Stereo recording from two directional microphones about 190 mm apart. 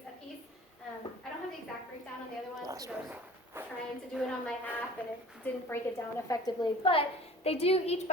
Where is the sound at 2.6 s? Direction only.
20° right (ahead or behind).